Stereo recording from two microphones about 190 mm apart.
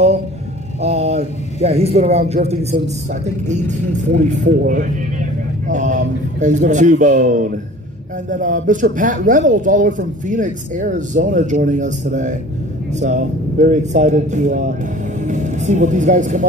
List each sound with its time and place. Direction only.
0.7 s a man's voice: 35° right (ahead or behind)